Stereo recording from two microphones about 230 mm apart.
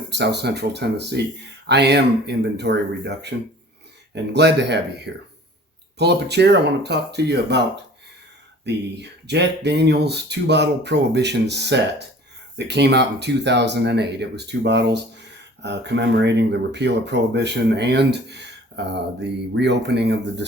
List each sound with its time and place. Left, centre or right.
0.1 s speech: right
8.6 s speech: right